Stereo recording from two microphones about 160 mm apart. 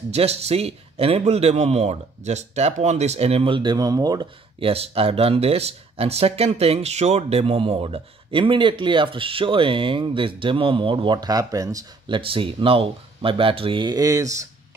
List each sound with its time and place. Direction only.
0.1 s speech: 40° right (ahead or behind); by 12.2 s 20° right (ahead or behind)
12.2 s speech: 35° right (ahead or behind)